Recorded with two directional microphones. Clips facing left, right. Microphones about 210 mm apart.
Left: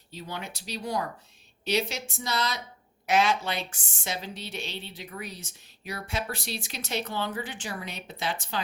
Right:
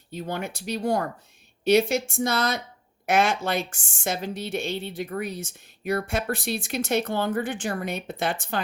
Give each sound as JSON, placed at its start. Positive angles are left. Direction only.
{"t": 0.1, "sound": "a woman's voice", "side_deg": -50}